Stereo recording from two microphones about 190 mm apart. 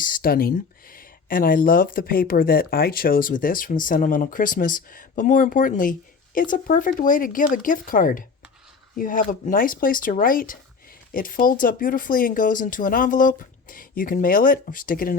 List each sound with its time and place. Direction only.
0.0 s speech: 50° left (ahead or behind)